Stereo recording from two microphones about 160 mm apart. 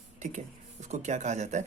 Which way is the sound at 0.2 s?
50° right (ahead or behind).